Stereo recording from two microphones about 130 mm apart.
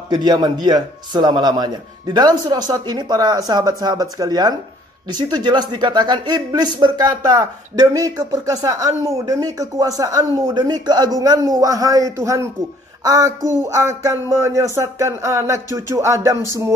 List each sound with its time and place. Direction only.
0.1 s speech: 35° right (ahead or behind)